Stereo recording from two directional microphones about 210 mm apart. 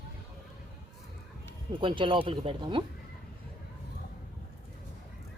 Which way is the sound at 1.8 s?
25° right (ahead or behind).